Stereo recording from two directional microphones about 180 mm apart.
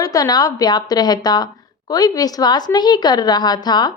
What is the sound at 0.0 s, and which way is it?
A woman's voice, 20° left (ahead or behind).